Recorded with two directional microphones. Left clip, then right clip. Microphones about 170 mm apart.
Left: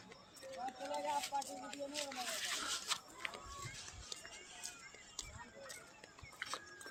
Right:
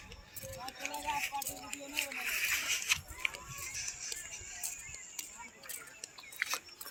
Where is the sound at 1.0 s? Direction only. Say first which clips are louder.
Right 4 dB; 25° left (ahead or behind).